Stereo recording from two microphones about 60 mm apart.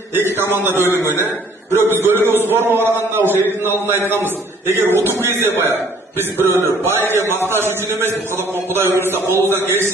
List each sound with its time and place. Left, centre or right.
0.1 s a man's voice: right
6.3 s a man's voice: right